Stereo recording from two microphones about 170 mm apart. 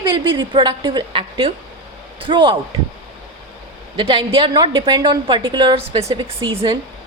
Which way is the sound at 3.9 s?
30° right (ahead or behind).